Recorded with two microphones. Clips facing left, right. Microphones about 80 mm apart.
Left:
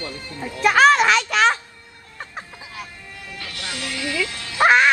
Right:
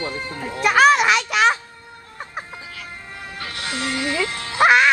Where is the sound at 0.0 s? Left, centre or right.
Right.